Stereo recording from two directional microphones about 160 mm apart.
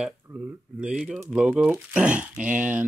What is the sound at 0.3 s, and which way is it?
Speech, 15° right (ahead or behind).